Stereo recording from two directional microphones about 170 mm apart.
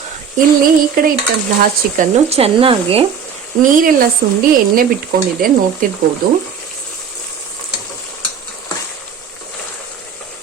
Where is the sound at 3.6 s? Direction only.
50° right (ahead or behind).